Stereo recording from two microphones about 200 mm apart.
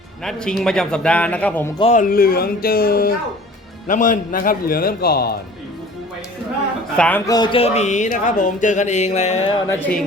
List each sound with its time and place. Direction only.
0.3 s speech: 5° left (ahead or behind)
1.8 s speech: 40° left (ahead or behind)
6.9 s speech: 5° left (ahead or behind)
7.3 s speech: 20° left (ahead or behind)
9.6 s speech: 10° left (ahead or behind)